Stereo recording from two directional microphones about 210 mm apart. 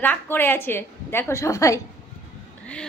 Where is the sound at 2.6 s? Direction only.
5° left (ahead or behind).